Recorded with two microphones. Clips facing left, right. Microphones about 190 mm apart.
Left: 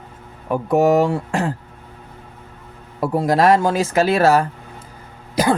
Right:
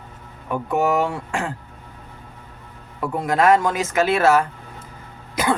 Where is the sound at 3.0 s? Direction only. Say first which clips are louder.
Left 3 dB; 35° left (ahead or behind).